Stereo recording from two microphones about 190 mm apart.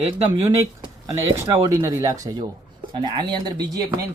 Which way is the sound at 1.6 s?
15° right (ahead or behind).